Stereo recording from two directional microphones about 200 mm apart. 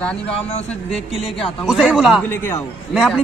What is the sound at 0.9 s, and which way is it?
A man's voice, centre (ahead or behind).